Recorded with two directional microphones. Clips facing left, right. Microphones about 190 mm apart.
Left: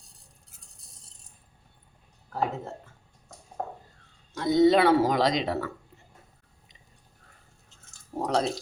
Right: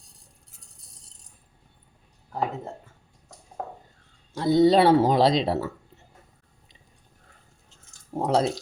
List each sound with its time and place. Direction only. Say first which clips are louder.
4.4 s speech: right 2 dB; 30° right (ahead or behind)
8.1 s speech: right 4 dB; 30° right (ahead or behind)